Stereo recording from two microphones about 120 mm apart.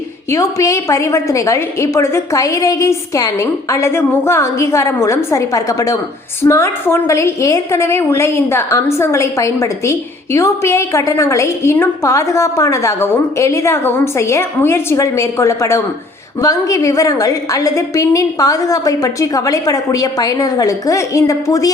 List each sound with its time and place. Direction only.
0.3 s a woman's voice: 25° left (ahead or behind)